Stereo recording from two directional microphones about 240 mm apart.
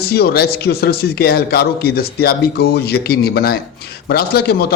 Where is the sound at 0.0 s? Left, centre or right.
Left.